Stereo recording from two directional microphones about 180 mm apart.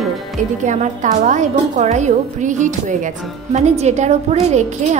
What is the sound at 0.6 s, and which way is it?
A woman's voice, 40° right (ahead or behind).